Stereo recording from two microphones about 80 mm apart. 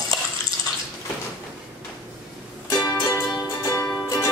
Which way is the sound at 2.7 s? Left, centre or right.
Left.